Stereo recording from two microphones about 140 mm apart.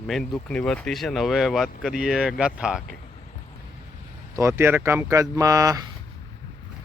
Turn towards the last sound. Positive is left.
turn(degrees=-25)  # may be behind; listen again after turning